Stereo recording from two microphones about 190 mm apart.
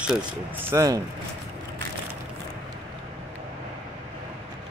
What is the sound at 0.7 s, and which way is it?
Speech, 15° right (ahead or behind).